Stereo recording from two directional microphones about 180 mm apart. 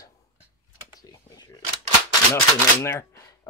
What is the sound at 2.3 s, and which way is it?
Speech, 15° left (ahead or behind).